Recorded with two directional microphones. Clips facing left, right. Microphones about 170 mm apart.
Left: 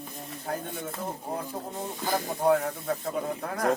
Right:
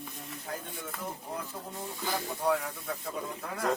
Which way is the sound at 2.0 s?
45° left (ahead or behind).